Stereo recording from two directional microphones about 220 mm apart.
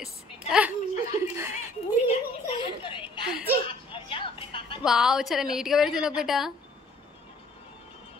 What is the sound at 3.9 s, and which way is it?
Speech, 25° left (ahead or behind).